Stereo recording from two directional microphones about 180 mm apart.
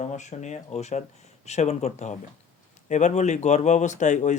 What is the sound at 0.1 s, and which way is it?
Speech, 40° left (ahead or behind).